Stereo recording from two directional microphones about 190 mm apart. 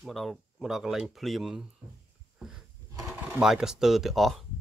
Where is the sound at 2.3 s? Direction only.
Centre (ahead or behind).